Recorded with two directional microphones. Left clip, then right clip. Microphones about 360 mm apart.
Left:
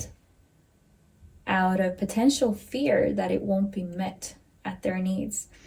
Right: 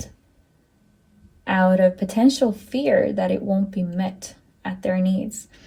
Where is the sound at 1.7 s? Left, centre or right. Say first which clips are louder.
Right 9 dB; centre.